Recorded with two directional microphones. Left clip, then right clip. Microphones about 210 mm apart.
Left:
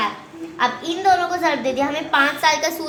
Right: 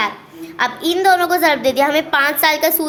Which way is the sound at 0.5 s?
50° right (ahead or behind).